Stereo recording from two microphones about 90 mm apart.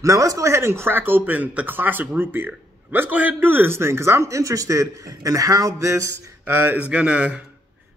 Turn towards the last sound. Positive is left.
turn(degrees=-15)  # may be behind; listen again after turning